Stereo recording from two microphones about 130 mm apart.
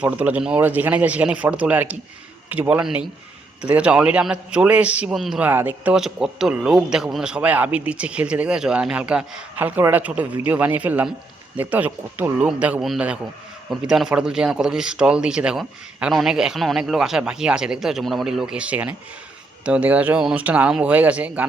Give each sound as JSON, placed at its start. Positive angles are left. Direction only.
{"t": 0.0, "sound": "speech", "side_deg": -10}
{"t": 5.4, "sound": "speech", "side_deg": -15}